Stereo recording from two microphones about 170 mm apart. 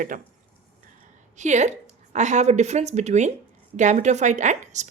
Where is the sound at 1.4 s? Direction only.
45° right (ahead or behind).